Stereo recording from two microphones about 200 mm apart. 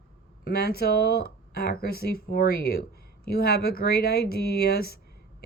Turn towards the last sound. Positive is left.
turn(degrees=50)  # may be behind; listen again after turning